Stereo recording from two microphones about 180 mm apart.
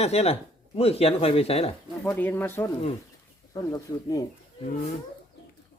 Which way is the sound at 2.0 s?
10° left (ahead or behind).